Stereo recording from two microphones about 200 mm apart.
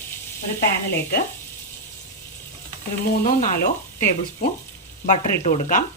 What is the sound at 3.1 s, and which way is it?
Speech, 45° left (ahead or behind).